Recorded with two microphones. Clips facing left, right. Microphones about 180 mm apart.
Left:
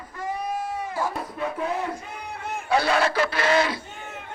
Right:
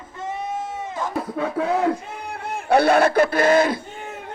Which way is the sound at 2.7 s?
60° right (ahead or behind).